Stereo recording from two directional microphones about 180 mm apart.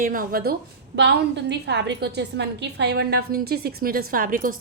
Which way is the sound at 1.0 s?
75° right (ahead or behind).